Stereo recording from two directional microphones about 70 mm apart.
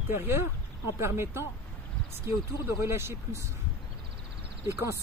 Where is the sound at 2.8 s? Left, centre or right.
Right.